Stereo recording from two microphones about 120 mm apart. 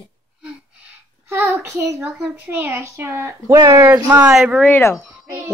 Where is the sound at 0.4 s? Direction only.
10° right (ahead or behind).